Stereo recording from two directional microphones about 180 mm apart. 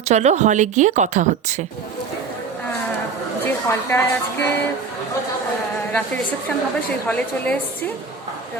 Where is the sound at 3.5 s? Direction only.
15° left (ahead or behind).